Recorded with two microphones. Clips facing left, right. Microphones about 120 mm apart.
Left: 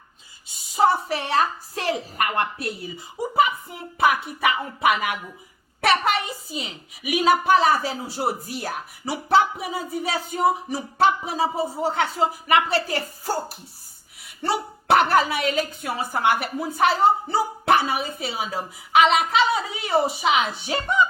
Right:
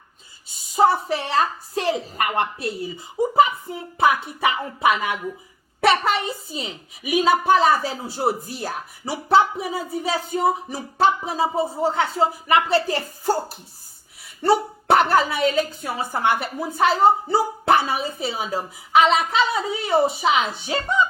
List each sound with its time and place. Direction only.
0.8 s a woman's voice: 30° right (ahead or behind)
14.4 s speech: 30° right (ahead or behind)